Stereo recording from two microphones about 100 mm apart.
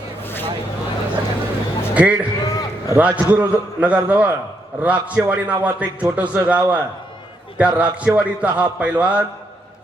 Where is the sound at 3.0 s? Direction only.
15° right (ahead or behind).